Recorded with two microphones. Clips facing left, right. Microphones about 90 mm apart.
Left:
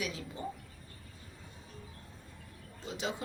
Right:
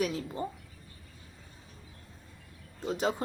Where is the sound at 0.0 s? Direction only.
45° right (ahead or behind).